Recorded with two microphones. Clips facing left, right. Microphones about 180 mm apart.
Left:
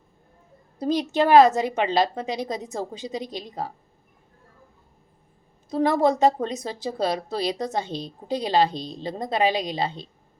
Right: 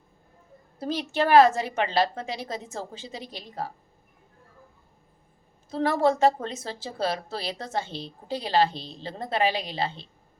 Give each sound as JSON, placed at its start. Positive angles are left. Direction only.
{"t": 0.8, "sound": "speech", "side_deg": 15}
{"t": 5.7, "sound": "speech", "side_deg": 15}